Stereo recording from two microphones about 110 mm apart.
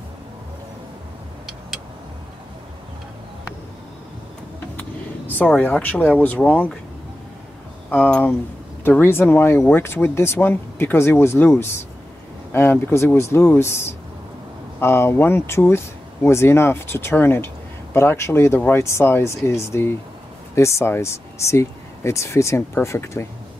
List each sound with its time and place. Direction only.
4.7 s speech: 15° left (ahead or behind)
7.9 s speech: 15° left (ahead or behind)